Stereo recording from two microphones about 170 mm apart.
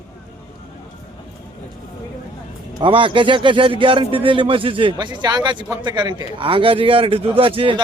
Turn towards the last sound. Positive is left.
turn(degrees=-30)  # may be behind; listen again after turning